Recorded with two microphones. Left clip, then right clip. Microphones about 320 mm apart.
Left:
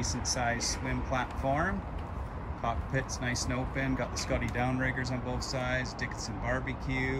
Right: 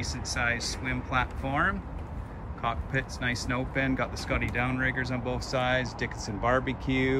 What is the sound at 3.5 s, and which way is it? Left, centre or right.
Speech, centre.